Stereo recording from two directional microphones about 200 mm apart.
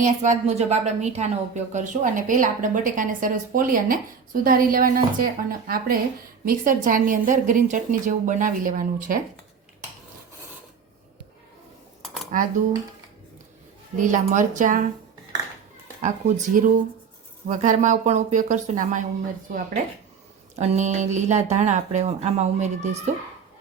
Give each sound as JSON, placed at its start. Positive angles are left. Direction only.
{"t": 0.0, "sound": "a woman's voice", "side_deg": -35}
{"t": 12.0, "sound": "cutlery", "side_deg": 0}
{"t": 13.9, "sound": "a woman's voice", "side_deg": -40}
{"t": 16.0, "sound": "a woman's voice", "side_deg": -40}
{"t": 20.6, "sound": "a woman's voice", "side_deg": -35}